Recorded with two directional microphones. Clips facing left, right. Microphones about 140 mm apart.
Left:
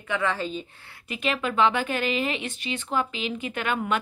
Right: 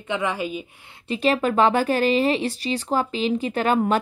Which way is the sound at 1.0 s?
35° right (ahead or behind).